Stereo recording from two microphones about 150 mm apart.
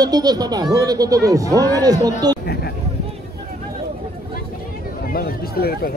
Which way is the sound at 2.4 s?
90° left.